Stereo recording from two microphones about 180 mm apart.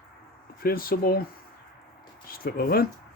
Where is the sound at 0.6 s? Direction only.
55° left (ahead or behind).